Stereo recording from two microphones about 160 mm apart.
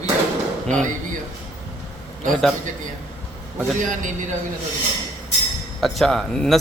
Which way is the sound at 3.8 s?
55° right (ahead or behind).